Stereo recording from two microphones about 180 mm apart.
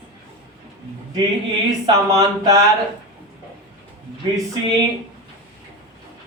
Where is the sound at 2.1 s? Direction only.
20° right (ahead or behind).